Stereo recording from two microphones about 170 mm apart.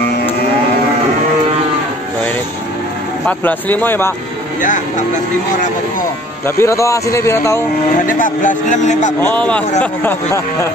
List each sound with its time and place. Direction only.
3.3 s speech: 10° left (ahead or behind)
4.6 s speech: 50° left (ahead or behind)
6.4 s speech: 15° left (ahead or behind)
8.0 s speech: 50° left (ahead or behind)
9.2 s speech: 10° left (ahead or behind)